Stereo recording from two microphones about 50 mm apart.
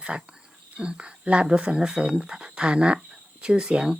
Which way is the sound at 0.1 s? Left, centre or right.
Centre.